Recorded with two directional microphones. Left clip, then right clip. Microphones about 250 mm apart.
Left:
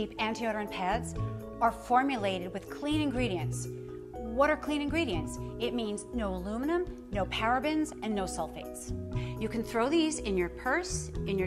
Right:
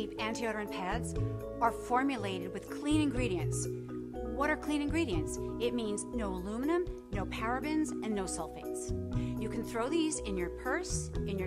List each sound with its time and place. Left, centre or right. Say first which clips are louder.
0.3 s speech: left 3 dB; left
0.7 s speech: left 5 dB; left
1.6 s speech: left 4 dB; left
2.8 s speech: left 1 dB; left
7.3 s speech: left 4 dB; left
8.1 s speech: left 3 dB; left